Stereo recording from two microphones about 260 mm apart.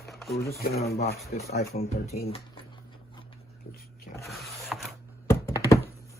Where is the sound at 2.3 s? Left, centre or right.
Centre.